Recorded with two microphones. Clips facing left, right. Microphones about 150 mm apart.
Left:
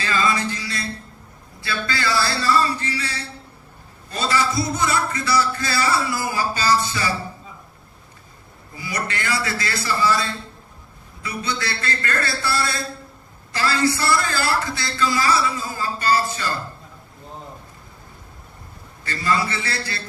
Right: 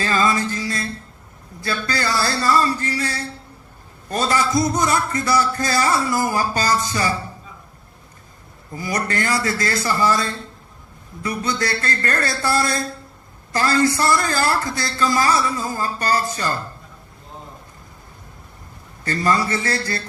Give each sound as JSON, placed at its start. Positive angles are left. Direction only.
{"t": 0.0, "sound": "music", "side_deg": -45}
{"t": 1.6, "sound": "a man's voice", "side_deg": -45}
{"t": 8.7, "sound": "a man's voice", "side_deg": -45}
{"t": 19.0, "sound": "a man's voice", "side_deg": -45}